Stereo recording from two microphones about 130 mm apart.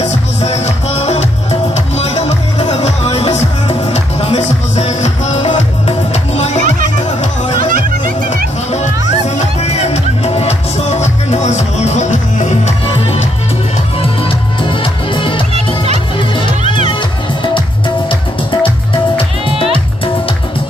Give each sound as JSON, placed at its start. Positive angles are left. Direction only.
{"t": 0.0, "sound": "music", "side_deg": 55}
{"t": 9.4, "sound": "music", "side_deg": 55}
{"t": 12.8, "sound": "music", "side_deg": 40}
{"t": 14.2, "sound": "music", "side_deg": 40}
{"t": 15.5, "sound": "music", "side_deg": -55}
{"t": 16.2, "sound": "music", "side_deg": 40}
{"t": 19.1, "sound": "music", "side_deg": 40}